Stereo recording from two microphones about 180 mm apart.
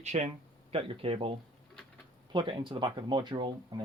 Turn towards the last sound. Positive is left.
turn(degrees=-25)  # may be behind; listen again after turning